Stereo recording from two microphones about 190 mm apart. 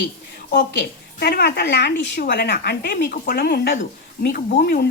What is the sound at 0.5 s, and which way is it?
A woman's voice, 60° left (ahead or behind).